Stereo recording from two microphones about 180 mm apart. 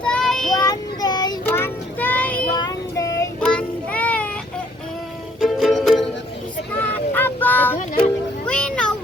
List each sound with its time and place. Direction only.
0.0 s child singing: 5° left (ahead or behind)
0.6 s child singing: 20° left (ahead or behind)
1.5 s child singing: 10° left (ahead or behind)
2.6 s child singing: 20° left (ahead or behind)
3.4 s child singing: 5° left (ahead or behind)
5.4 s music: centre (ahead or behind)
6.7 s a sound: 10° left (ahead or behind)
7.8 s music: 45° left (ahead or behind)
8.4 s a sound: 5° left (ahead or behind)